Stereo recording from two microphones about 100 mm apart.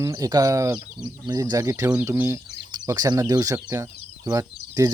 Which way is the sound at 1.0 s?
40° right (ahead or behind).